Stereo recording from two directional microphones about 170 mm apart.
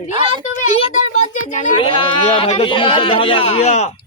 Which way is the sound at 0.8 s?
45° left (ahead or behind).